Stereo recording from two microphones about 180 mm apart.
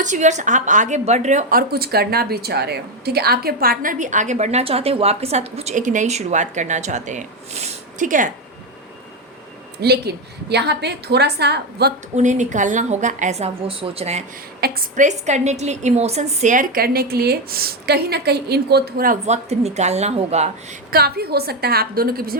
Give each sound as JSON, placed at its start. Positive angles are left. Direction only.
{"t": 0.0, "sound": "a woman's voice", "side_deg": -40}
{"t": 9.8, "sound": "a woman's voice", "side_deg": -65}
{"t": 12.1, "sound": "a woman's voice", "side_deg": -40}
{"t": 14.6, "sound": "a woman's voice", "side_deg": -60}
{"t": 19.2, "sound": "a woman's voice", "side_deg": -40}
{"t": 20.9, "sound": "a woman's voice", "side_deg": -60}